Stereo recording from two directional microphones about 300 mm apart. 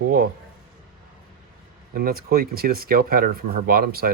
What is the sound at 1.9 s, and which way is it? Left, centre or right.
Speech, right.